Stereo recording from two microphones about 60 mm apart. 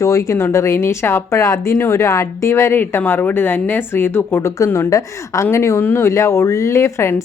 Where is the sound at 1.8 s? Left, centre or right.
Left.